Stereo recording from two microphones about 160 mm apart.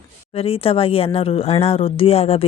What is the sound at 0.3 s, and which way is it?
Speech, 35° left (ahead or behind).